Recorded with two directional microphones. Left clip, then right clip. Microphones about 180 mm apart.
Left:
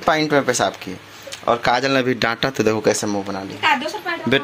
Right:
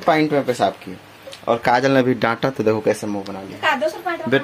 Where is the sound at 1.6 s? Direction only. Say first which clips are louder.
Right 4 dB; 15° right (ahead or behind).